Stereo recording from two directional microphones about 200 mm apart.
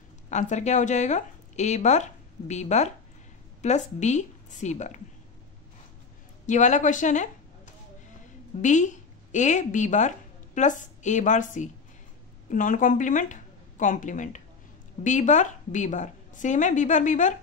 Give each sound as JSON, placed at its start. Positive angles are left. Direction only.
{"t": 0.3, "sound": "a woman's voice", "side_deg": 35}
{"t": 6.4, "sound": "a woman's voice", "side_deg": 35}